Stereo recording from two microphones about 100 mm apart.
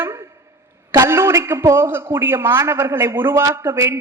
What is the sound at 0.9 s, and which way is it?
A woman's voice, 25° right (ahead or behind).